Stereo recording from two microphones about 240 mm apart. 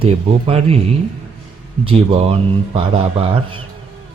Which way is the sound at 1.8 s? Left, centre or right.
Right.